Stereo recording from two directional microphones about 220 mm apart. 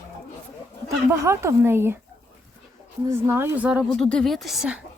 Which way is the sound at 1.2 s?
10° right (ahead or behind).